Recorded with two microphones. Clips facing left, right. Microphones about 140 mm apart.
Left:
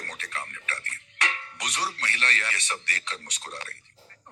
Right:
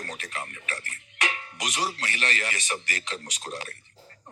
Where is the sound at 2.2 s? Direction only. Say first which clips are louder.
Right 1 dB; 10° right (ahead or behind).